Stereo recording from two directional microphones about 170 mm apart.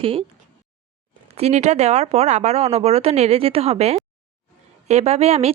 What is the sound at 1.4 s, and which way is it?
Speech, 40° right (ahead or behind).